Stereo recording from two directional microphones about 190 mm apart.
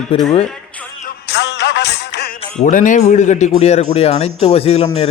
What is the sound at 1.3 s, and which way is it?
Music, 65° left (ahead or behind).